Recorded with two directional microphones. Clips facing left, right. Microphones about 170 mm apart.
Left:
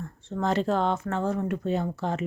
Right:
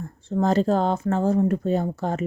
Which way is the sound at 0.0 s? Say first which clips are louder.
Right 6 dB; 35° right (ahead or behind).